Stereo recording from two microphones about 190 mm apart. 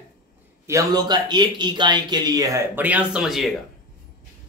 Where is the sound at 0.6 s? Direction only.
20° right (ahead or behind); by 3.5 s centre (ahead or behind).